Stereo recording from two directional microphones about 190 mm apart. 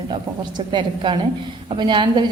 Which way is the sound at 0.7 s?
25° right (ahead or behind).